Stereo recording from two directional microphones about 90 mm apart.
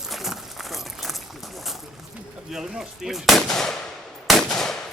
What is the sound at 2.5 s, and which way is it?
Speech, 5° right (ahead or behind).